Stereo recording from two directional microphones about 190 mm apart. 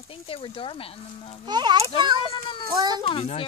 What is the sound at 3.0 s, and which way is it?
Speech, 30° left (ahead or behind).